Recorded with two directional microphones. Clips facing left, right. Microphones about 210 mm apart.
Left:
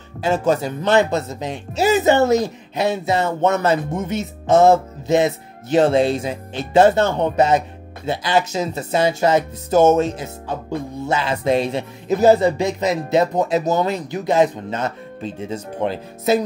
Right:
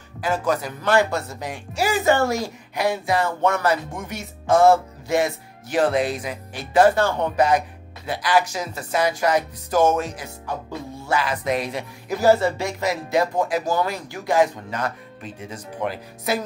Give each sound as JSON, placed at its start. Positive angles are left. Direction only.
{"t": 0.2, "sound": "speech", "side_deg": 25}